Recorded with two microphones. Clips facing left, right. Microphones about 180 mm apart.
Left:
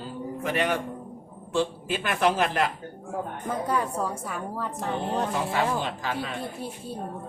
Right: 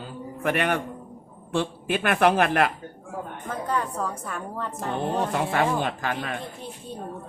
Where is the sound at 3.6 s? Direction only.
10° left (ahead or behind).